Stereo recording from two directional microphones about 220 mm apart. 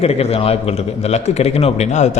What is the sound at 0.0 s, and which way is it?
A man's voice, 30° left (ahead or behind).